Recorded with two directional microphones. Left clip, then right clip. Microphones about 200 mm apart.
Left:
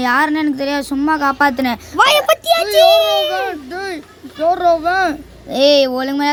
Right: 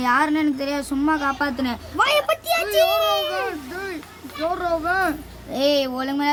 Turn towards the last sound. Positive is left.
turn(degrees=25)  # may be behind; listen again after turning